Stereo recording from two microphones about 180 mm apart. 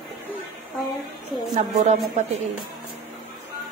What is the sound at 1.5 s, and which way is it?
Speech, 40° right (ahead or behind).